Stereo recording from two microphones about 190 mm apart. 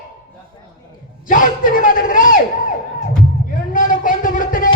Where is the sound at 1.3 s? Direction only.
45° left (ahead or behind).